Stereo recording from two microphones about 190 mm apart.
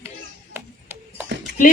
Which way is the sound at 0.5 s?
10° right (ahead or behind).